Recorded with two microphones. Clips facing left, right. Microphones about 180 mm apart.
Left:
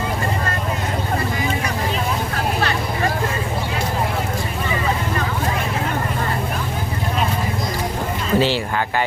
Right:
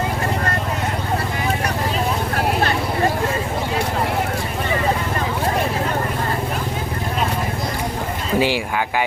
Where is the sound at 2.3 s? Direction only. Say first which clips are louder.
Right 3 dB; 45° right (ahead or behind).